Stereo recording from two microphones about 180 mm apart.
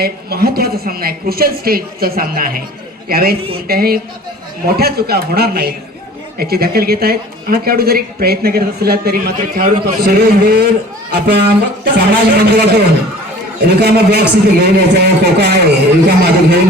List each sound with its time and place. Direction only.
0.0 s speech: 60° right (ahead or behind)